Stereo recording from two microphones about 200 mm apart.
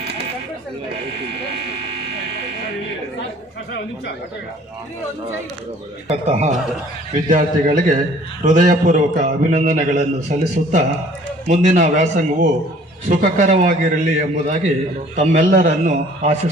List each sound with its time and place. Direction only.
3.7 s speech: 60° left (ahead or behind)
6.1 s a man's voice: 35° right (ahead or behind)